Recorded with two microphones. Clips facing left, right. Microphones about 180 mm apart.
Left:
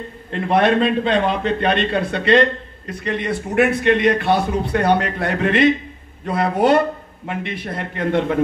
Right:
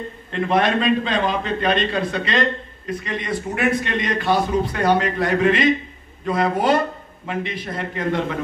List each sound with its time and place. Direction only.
0.3 s a man's voice: 60° left (ahead or behind)